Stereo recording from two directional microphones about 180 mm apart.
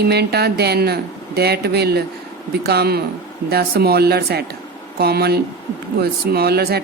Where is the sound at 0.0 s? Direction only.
65° right (ahead or behind).